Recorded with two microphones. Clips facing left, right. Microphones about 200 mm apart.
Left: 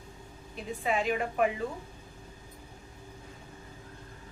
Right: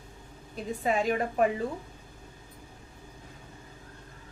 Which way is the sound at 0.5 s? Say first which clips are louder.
Right 2 dB; 40° right (ahead or behind).